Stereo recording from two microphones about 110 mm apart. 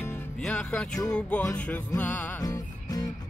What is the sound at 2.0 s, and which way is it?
Music, 15° left (ahead or behind).